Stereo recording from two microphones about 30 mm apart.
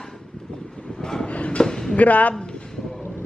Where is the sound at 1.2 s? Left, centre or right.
Left.